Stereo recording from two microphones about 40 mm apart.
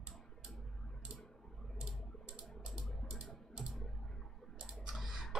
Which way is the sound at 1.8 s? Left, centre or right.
Right.